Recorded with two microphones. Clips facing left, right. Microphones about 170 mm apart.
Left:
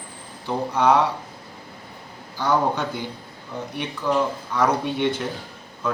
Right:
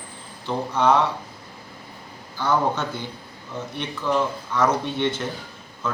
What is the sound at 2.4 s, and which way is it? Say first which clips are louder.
Speech: left 1 dB; 15° left (ahead or behind).